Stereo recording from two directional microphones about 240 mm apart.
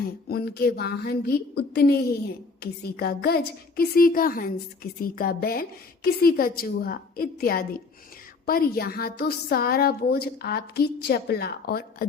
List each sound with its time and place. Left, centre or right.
0.0 s speech: left